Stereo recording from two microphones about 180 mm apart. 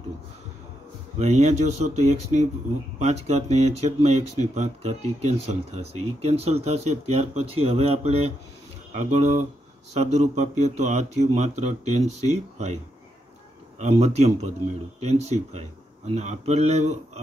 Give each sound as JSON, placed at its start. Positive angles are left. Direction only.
{"t": 1.1, "sound": "speech", "side_deg": -40}
{"t": 13.7, "sound": "speech", "side_deg": -35}